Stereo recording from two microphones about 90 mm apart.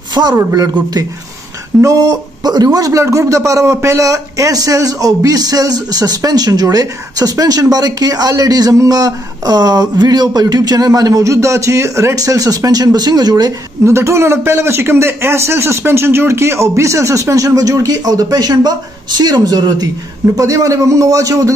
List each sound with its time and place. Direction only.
0.1 s a man's voice: 50° right (ahead or behind)
0.4 s a man's voice: 40° right (ahead or behind)
1.8 s a man's voice: 40° right (ahead or behind)
13.8 s a man's voice: 30° right (ahead or behind)